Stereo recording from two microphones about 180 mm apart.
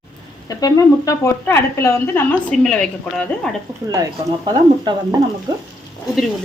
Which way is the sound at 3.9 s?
20° right (ahead or behind).